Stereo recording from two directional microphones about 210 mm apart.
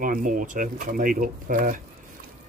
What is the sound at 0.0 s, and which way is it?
Speech, 40° right (ahead or behind).